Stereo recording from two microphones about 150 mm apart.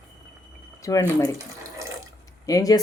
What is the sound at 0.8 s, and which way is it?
Speech, 20° left (ahead or behind).